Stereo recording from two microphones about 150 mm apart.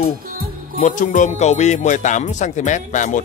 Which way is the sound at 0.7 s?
60° left (ahead or behind).